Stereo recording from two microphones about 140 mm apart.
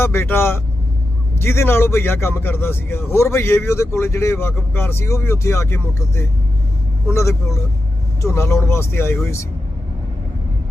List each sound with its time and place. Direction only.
0.0 s a man's voice: 15° left (ahead or behind)